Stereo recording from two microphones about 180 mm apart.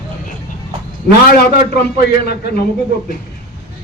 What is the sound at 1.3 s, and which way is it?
A man's voice, 60° left (ahead or behind).